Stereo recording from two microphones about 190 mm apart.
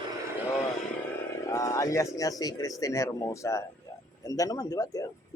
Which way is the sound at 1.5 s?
15° left (ahead or behind).